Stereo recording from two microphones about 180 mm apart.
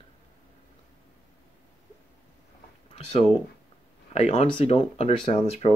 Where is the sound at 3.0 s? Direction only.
35° left (ahead or behind).